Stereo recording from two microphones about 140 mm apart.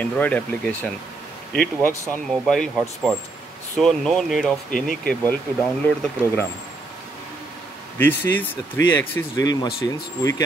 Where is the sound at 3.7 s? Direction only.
5° left (ahead or behind).